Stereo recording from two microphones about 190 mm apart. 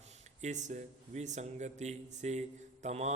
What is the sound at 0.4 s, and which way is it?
A man's voice, 40° right (ahead or behind).